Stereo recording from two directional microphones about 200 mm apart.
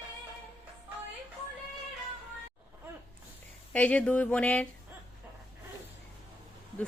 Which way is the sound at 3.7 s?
5° left (ahead or behind).